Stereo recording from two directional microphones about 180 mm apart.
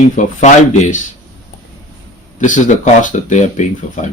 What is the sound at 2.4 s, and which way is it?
Speech, 45° left (ahead or behind).